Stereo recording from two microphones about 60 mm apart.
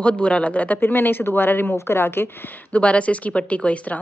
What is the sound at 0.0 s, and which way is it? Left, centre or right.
A woman's voice, centre.